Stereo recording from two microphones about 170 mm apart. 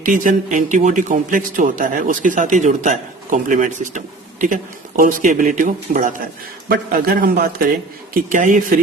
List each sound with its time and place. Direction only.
0.0 s a man's voice: 50° right (ahead or behind)
6.7 s a man's voice: 60° right (ahead or behind)
8.3 s a man's voice: 50° right (ahead or behind)